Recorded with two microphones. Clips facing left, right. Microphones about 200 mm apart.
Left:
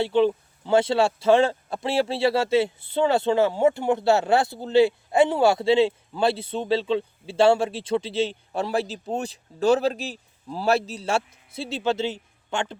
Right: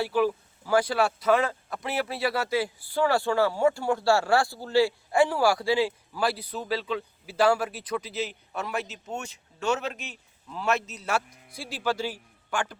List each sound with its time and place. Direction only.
0.0 s speech: 25° left (ahead or behind)